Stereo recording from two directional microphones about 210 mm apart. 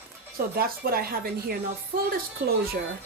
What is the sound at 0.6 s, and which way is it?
Speech, 45° right (ahead or behind).